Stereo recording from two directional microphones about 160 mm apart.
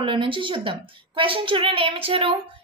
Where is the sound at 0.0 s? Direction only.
30° right (ahead or behind).